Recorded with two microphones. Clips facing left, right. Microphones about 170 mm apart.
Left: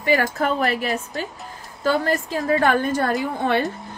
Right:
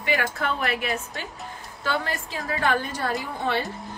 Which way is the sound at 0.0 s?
40° left (ahead or behind).